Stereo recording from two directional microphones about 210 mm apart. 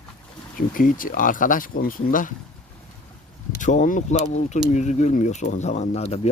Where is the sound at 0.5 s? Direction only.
40° left (ahead or behind).